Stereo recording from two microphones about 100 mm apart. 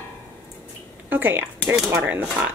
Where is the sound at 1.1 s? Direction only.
20° right (ahead or behind).